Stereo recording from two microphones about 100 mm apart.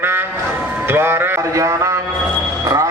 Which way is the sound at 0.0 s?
20° right (ahead or behind).